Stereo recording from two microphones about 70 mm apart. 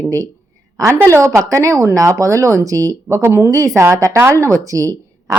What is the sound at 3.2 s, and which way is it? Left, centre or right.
Speech, right.